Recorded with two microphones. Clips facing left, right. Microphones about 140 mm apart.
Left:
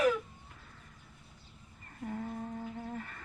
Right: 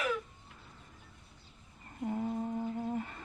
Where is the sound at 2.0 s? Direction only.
20° right (ahead or behind).